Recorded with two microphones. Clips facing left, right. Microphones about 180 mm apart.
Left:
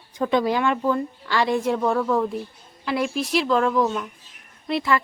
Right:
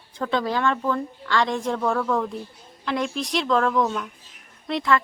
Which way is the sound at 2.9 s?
5° left (ahead or behind).